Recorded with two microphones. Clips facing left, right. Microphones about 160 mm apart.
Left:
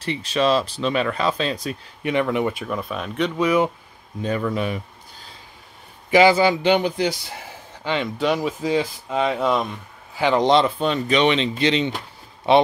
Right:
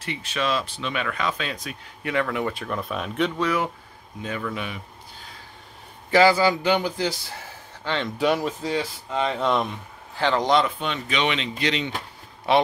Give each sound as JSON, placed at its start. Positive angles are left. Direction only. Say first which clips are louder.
{"t": 0.0, "sound": "speech", "louder": "left 7 dB", "side_deg": 35}
{"t": 2.0, "sound": "speech", "louder": "left 4 dB", "side_deg": 20}
{"t": 3.3, "sound": "speech", "louder": "left 5 dB", "side_deg": 20}
{"t": 4.2, "sound": "speech", "louder": "left 7 dB", "side_deg": 35}
{"t": 6.0, "sound": "speech", "louder": "left 3 dB", "side_deg": 20}
{"t": 8.2, "sound": "speech", "louder": "right 1 dB", "side_deg": 0}
{"t": 8.6, "sound": "speech", "louder": "left 5 dB", "side_deg": 15}
{"t": 10.2, "sound": "speech", "louder": "left 4 dB", "side_deg": 20}